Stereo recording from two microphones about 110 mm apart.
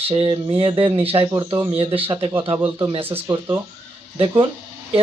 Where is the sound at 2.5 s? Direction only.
20° right (ahead or behind).